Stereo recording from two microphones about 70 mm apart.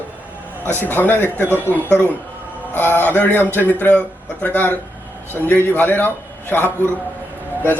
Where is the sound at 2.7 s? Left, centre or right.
Left.